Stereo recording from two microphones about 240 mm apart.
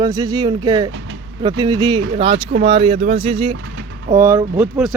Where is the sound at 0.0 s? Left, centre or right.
Centre.